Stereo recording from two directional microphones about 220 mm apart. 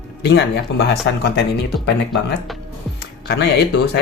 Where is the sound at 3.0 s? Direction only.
50° left (ahead or behind).